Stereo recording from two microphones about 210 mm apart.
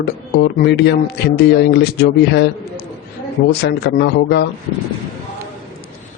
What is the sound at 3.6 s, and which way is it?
Speech, 50° left (ahead or behind).